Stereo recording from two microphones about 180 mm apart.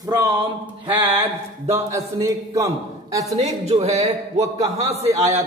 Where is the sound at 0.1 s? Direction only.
25° right (ahead or behind).